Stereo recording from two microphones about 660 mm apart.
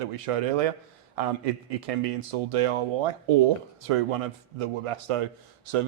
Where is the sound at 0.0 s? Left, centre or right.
Right.